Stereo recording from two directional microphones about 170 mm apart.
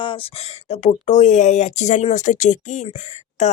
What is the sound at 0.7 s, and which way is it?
Speech, 40° left (ahead or behind).